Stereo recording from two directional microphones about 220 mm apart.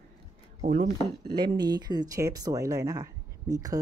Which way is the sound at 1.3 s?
20° right (ahead or behind).